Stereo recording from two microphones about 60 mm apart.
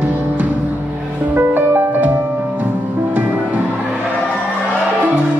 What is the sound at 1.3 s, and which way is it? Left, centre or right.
Music, right.